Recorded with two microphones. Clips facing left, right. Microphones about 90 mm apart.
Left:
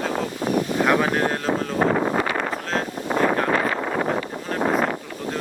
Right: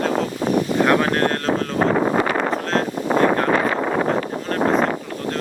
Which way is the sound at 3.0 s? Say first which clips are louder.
Right 3 dB; 90° right.